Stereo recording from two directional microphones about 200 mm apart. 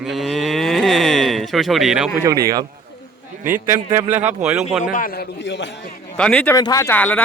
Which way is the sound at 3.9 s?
10° right (ahead or behind).